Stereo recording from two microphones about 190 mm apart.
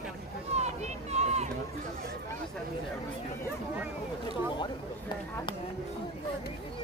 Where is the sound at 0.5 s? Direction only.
35° right (ahead or behind).